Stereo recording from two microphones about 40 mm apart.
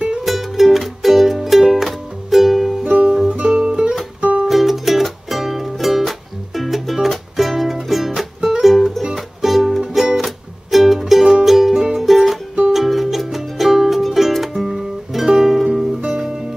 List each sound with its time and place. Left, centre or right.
0.2 s music: centre
2.8 s music: right
4.2 s music: right
4.5 s music: centre
11.7 s music: centre
12.0 s music: centre